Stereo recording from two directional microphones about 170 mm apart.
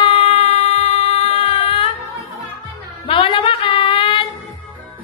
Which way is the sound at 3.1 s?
35° left (ahead or behind).